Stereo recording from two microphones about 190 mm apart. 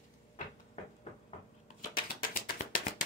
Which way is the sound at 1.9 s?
50° left (ahead or behind).